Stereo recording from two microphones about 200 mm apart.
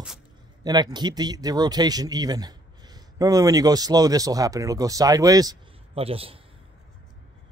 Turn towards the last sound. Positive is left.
turn(degrees=-30)  # may be behind; listen again after turning